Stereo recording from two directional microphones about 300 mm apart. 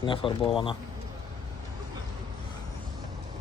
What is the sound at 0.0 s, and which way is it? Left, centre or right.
Speech, centre.